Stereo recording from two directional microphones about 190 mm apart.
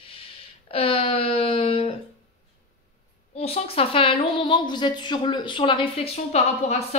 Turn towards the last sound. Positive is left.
turn(degrees=35)  # may be behind; listen again after turning